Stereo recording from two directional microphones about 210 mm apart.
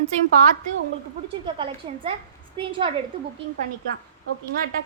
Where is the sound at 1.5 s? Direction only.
25° right (ahead or behind).